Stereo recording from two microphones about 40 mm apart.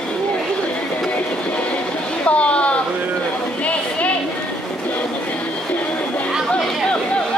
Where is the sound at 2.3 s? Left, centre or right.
Left.